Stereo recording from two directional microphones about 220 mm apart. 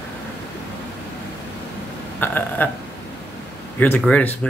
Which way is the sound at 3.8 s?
5° left (ahead or behind).